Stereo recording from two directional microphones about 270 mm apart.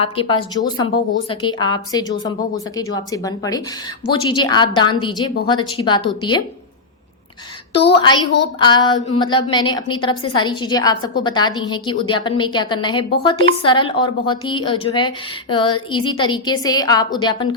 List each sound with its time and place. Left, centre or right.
0.0 s a woman's voice: centre
7.9 s a woman's voice: centre